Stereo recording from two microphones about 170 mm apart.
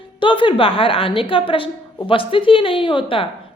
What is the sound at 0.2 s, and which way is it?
A woman's voice, 30° left (ahead or behind).